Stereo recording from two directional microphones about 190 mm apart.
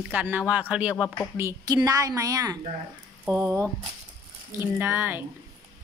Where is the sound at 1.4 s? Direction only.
20° right (ahead or behind).